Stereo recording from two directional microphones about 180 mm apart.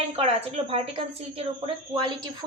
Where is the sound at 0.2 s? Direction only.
35° right (ahead or behind).